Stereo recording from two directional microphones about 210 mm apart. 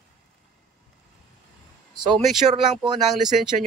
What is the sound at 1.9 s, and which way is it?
Speech, 20° right (ahead or behind).